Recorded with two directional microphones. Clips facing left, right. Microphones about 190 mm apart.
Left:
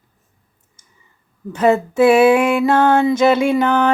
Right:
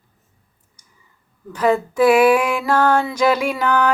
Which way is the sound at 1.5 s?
25° left (ahead or behind).